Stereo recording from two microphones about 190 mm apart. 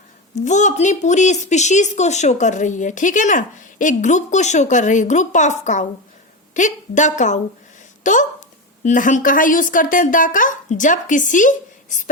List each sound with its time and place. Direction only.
0.4 s a woman's voice: 40° left (ahead or behind)